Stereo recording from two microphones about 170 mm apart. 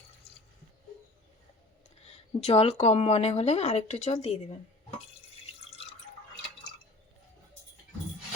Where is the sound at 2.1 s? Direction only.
40° left (ahead or behind).